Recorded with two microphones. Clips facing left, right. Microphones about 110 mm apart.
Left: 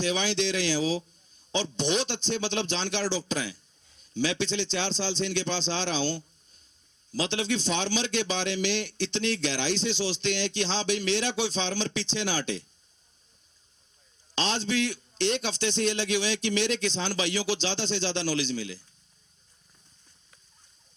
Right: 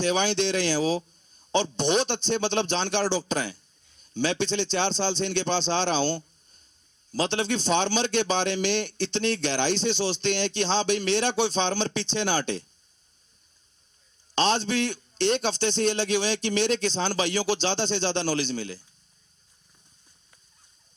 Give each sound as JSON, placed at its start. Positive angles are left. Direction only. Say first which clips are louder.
{"t": 0.0, "sound": "a man's voice", "louder": "right 3 dB", "side_deg": -55}
{"t": 14.3, "sound": "a man's voice", "louder": "right 4 dB", "side_deg": -55}